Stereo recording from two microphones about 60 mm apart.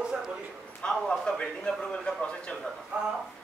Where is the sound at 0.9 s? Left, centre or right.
Centre.